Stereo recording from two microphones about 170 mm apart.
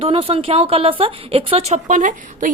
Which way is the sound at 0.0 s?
35° right (ahead or behind).